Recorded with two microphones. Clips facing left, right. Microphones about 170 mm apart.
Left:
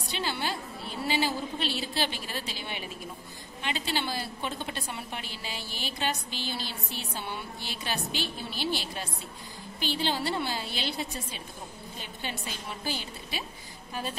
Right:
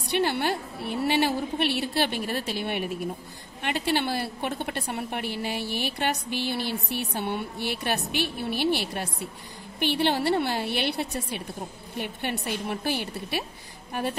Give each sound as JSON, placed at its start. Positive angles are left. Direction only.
{"t": 0.1, "sound": "a woman's voice", "side_deg": -60}